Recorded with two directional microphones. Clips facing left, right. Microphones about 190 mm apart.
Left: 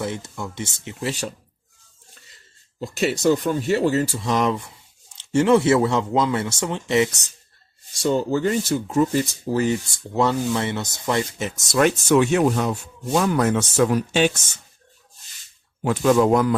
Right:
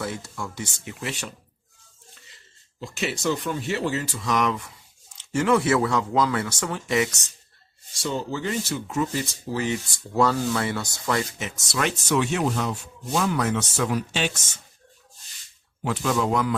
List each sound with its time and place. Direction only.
0.0 s speech: 20° left (ahead or behind)
2.8 s speech: 40° left (ahead or behind)
8.0 s speech: 45° left (ahead or behind)
10.2 s speech: 20° left (ahead or behind); by 14.3 s 50° left (ahead or behind)
15.8 s speech: 50° left (ahead or behind)